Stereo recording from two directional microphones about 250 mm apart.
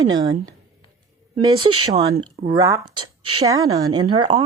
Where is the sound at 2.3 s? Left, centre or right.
Right.